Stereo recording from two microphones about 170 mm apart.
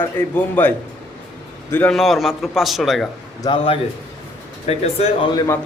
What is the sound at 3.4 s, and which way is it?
Speech, 35° left (ahead or behind).